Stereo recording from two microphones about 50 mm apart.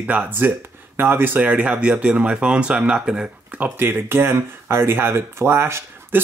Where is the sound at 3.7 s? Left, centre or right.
Right.